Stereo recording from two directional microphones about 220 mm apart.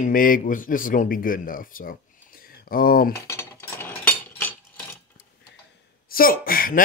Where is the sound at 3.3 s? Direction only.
10° left (ahead or behind).